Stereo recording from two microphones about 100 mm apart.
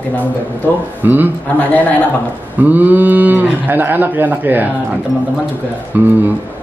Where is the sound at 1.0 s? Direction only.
20° right (ahead or behind).